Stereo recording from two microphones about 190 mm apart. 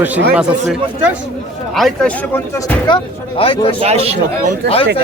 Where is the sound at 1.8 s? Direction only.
5° left (ahead or behind).